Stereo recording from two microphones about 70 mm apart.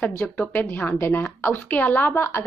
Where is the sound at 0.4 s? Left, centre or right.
Left.